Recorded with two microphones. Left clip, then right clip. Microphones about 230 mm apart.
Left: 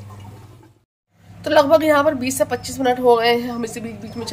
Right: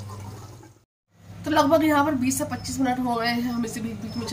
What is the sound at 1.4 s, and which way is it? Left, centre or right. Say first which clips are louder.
A woman's voice: left 6 dB; left.